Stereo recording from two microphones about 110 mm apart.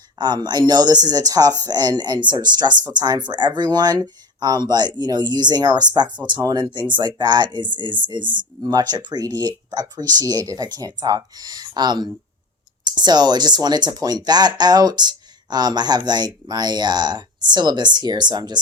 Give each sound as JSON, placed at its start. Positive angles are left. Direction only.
{"t": 0.2, "sound": "speech", "side_deg": -40}